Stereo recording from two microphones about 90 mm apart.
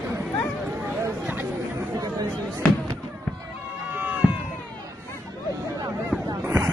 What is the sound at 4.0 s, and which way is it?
Cat, 15° right (ahead or behind).